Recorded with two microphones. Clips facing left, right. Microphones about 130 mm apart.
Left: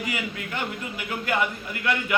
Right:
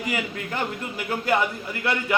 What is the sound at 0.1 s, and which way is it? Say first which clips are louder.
A man's voice: right 3 dB; 40° right (ahead or behind).